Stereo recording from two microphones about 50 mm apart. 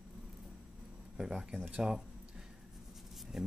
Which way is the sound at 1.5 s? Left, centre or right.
Right.